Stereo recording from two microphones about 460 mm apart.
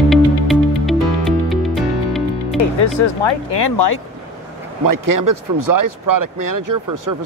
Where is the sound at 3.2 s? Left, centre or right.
Left.